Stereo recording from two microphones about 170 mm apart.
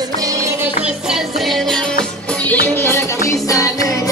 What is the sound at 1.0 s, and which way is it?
Music, centre (ahead or behind).